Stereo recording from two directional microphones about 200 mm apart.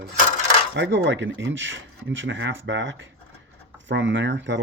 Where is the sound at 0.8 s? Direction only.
65° right (ahead or behind).